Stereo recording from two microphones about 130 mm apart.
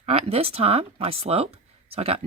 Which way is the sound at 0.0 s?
50° right (ahead or behind).